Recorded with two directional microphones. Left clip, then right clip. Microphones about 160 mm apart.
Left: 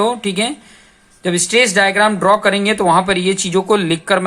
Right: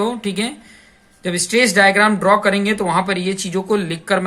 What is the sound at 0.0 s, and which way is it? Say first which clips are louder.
Speech: left 5 dB; 40° left (ahead or behind).